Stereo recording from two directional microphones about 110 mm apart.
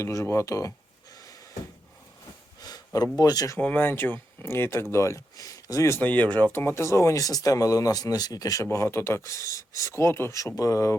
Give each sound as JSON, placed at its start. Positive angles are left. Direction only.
{"t": 0.0, "sound": "speech", "side_deg": 30}
{"t": 2.6, "sound": "speech", "side_deg": 35}
{"t": 3.6, "sound": "speech", "side_deg": 15}
{"t": 6.0, "sound": "speech", "side_deg": 15}